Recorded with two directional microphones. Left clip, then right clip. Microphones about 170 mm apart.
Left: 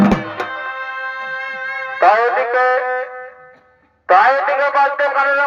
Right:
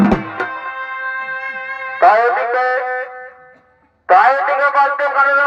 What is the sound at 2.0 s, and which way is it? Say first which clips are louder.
Music: right 1 dB; 20° left (ahead or behind).